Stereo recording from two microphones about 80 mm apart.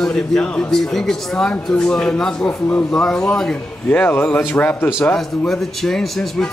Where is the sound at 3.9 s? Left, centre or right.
Centre.